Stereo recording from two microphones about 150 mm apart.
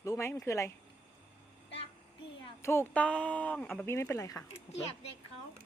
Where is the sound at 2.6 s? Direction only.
15° left (ahead or behind).